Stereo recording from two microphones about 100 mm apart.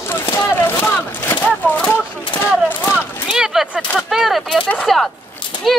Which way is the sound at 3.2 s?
5° right (ahead or behind).